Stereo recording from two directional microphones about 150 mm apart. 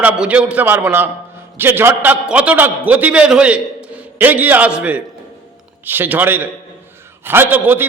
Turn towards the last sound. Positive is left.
turn(degrees=-15)  # may be behind; listen again after turning